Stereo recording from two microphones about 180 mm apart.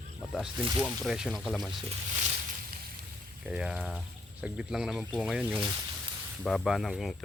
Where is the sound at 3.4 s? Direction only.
5° right (ahead or behind).